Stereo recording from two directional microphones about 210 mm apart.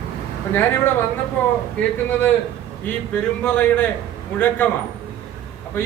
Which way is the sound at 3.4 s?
5° left (ahead or behind).